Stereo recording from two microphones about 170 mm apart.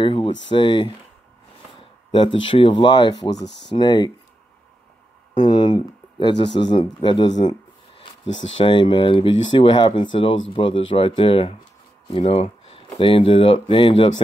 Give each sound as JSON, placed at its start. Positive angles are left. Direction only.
{"t": 0.0, "sound": "speech", "side_deg": 30}
{"t": 1.8, "sound": "a sound", "side_deg": 30}
{"t": 2.4, "sound": "speech", "side_deg": 30}
{"t": 3.4, "sound": "speech", "side_deg": 90}
{"t": 3.7, "sound": "speech", "side_deg": 25}
{"t": 5.4, "sound": "speech", "side_deg": 25}
{"t": 8.5, "sound": "speech", "side_deg": 30}